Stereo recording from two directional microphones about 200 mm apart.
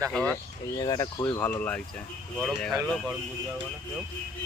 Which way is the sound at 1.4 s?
10° left (ahead or behind).